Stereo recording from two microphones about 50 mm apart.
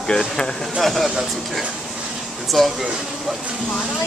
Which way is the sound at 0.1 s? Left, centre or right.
Centre.